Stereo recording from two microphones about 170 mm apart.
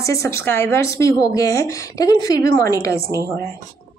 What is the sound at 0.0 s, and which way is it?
A woman's voice, 15° left (ahead or behind).